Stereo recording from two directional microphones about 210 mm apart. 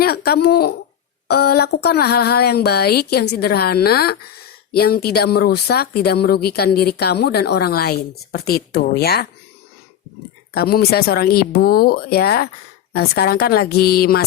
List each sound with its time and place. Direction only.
0.0 s speech: 50° left (ahead or behind)
10.5 s speech: 50° left (ahead or behind)